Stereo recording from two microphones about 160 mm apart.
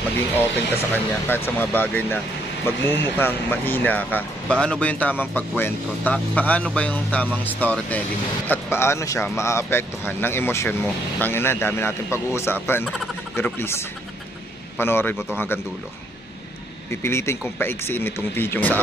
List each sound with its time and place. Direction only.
0.9 s speech: 10° left (ahead or behind)
16.9 s speech: 15° left (ahead or behind)